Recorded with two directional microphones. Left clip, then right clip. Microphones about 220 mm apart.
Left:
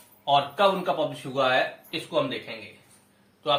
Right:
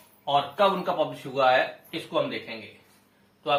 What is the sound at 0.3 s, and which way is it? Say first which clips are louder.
Speech: left 1 dB; 20° left (ahead or behind).